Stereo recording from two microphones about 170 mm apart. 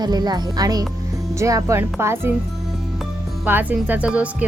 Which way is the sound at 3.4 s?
10° right (ahead or behind).